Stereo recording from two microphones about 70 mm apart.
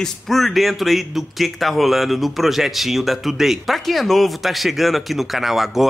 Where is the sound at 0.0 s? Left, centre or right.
Centre.